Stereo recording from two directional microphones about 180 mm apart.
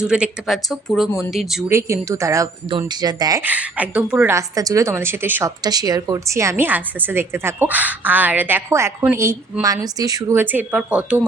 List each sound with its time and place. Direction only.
0.0 s speech: 5° right (ahead or behind)
2.0 s speech: 15° right (ahead or behind)
3.4 s a woman's voice: 10° right (ahead or behind)